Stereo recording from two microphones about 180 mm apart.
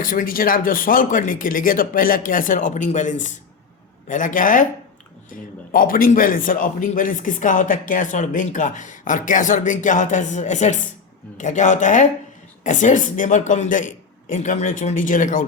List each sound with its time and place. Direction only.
0.0 s a man's voice: 50° left (ahead or behind)